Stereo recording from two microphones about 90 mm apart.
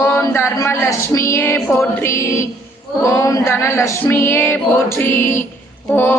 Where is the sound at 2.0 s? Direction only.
30° left (ahead or behind).